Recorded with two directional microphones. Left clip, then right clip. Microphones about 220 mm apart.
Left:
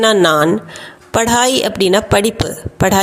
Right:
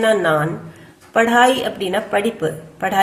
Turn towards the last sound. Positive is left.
turn(degrees=50)  # may be behind; listen again after turning